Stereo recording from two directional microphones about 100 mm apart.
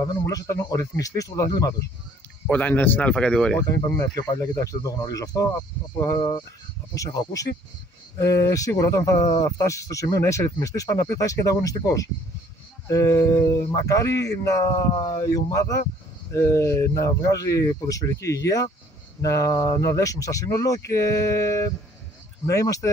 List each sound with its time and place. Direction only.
0.0 s speech: 35° left (ahead or behind)
2.4 s speech: 15° left (ahead or behind)
4.0 s speech: 45° left (ahead or behind)
4.4 s speech: 35° left (ahead or behind)
6.1 s speech: 50° left (ahead or behind)
6.9 s speech: 35° left (ahead or behind)